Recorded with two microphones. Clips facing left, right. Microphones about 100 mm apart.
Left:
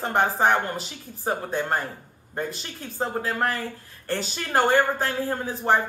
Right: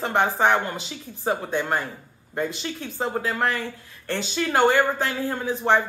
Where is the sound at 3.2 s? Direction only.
40° left (ahead or behind).